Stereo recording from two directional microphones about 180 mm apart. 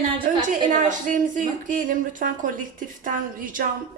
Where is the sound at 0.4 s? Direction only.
45° right (ahead or behind).